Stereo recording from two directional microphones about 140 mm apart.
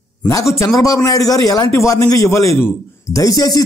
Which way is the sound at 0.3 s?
20° left (ahead or behind).